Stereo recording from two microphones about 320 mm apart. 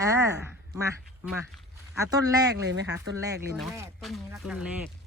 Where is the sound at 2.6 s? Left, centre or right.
Right.